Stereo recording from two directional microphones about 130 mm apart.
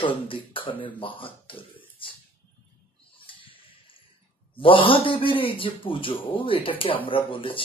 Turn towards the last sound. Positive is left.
turn(degrees=40)  # may be behind; listen again after turning